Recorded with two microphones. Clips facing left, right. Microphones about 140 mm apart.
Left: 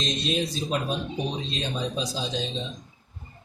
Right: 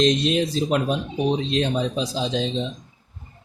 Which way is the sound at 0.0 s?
90° right.